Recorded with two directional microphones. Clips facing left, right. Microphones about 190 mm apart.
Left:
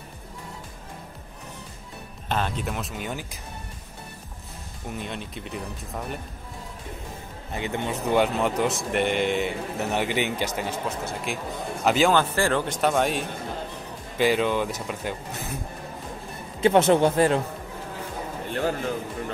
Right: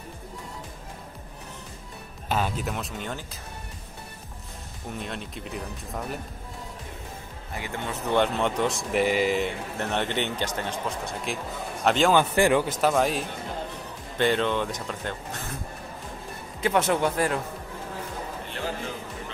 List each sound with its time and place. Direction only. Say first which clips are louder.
2.2 s a man's voice: even; 5° right (ahead or behind); by 3.3 s 10° left (ahead or behind)
4.9 s a man's voice: left 1 dB; centre (ahead or behind)
7.5 s a man's voice: left 4 dB; 20° left (ahead or behind); by 12.1 s 5° left (ahead or behind)
12.1 s speech: right 2 dB; 15° right (ahead or behind)
12.6 s a man's voice: even; centre (ahead or behind)
16.6 s speech: left 5 dB; 25° left (ahead or behind)